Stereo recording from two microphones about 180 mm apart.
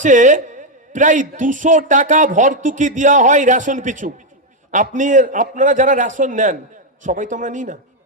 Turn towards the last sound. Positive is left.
turn(degrees=-45)  # may be behind; listen again after turning